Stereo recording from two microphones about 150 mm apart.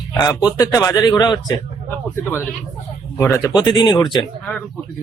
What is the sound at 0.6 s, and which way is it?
Speech, 20° left (ahead or behind).